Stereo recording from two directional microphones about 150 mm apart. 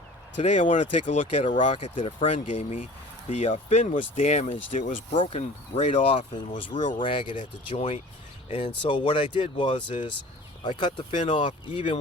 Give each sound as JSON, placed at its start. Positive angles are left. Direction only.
{"t": 0.4, "sound": "speech", "side_deg": 55}
{"t": 5.1, "sound": "speech", "side_deg": 35}